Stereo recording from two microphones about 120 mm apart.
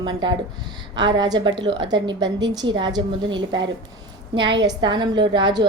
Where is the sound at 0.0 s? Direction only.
35° right (ahead or behind).